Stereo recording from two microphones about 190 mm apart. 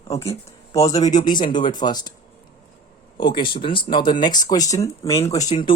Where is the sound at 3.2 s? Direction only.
25° left (ahead or behind).